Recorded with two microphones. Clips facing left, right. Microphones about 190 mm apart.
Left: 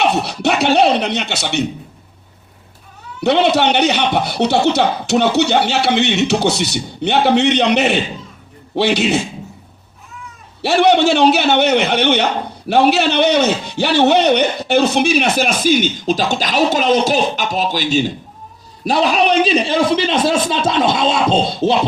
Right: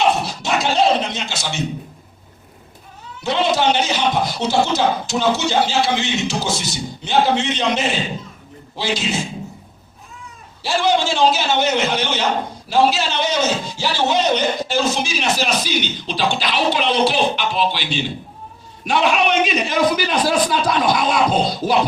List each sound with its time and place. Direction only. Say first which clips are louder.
0.0 s speech: left 3 dB; 65° left (ahead or behind)
3.2 s a man's voice: left 5 dB; 65° left (ahead or behind)
10.6 s a man's voice: left 6 dB; 65° left (ahead or behind); by 21.8 s 25° left (ahead or behind)